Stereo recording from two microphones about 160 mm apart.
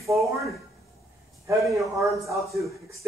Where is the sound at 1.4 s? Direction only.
20° right (ahead or behind).